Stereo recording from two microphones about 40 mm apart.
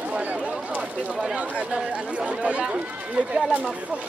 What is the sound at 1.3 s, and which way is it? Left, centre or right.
Speech, right.